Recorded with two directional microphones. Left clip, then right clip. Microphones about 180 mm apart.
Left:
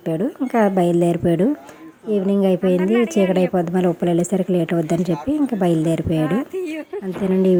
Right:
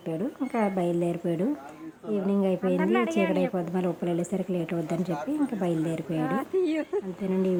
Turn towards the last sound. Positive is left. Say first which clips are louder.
# left 10 dB
turn(degrees=35)  # may be behind; listen again after turning